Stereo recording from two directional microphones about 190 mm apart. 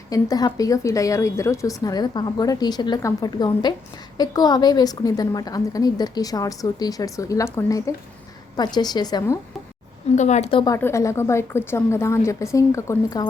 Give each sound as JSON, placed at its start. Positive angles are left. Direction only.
{"t": 0.1, "sound": "a woman's voice", "side_deg": 20}
{"t": 10.2, "sound": "a woman's voice", "side_deg": 35}
{"t": 10.8, "sound": "a woman's voice", "side_deg": 15}